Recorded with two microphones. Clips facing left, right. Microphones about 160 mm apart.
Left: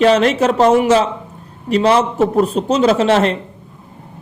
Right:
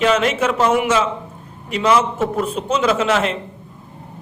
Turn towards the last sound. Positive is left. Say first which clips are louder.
# left 5 dB
turn(degrees=40)  # may be behind; listen again after turning